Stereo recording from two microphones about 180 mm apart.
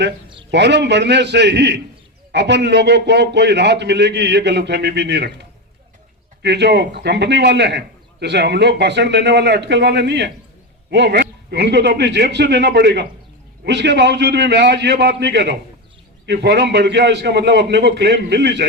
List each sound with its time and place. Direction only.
0.5 s a man's voice: 75° right (ahead or behind)